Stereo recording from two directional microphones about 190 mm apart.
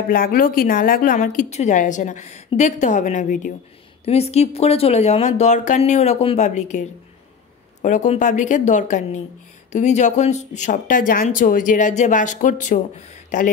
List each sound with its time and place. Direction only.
0.1 s speech: 50° left (ahead or behind)